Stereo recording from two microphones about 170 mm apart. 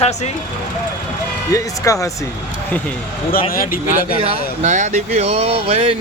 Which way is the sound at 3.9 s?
40° right (ahead or behind).